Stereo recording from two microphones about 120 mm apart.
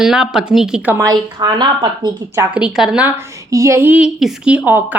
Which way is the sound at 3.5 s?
25° right (ahead or behind).